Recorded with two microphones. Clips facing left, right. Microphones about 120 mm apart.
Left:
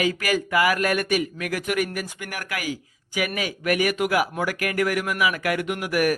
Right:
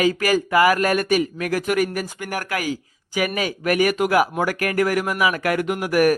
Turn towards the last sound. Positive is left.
turn(degrees=-40)  # may be behind; listen again after turning